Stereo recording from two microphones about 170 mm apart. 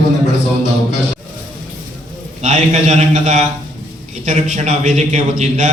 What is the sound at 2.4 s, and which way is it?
A man's voice, 45° right (ahead or behind).